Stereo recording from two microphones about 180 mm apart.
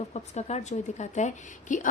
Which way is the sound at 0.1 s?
35° left (ahead or behind).